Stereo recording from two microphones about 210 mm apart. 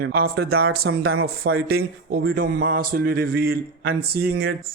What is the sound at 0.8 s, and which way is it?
Speech, 80° right.